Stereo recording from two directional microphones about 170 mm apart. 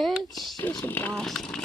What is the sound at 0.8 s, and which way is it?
Speech, 10° left (ahead or behind).